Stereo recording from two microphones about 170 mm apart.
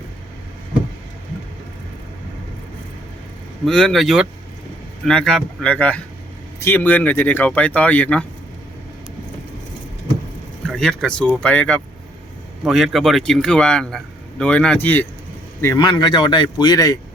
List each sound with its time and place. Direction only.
3.7 s a man's voice: 5° left (ahead or behind)
10.7 s a man's voice: 5° left (ahead or behind)
15.6 s speech: 25° left (ahead or behind)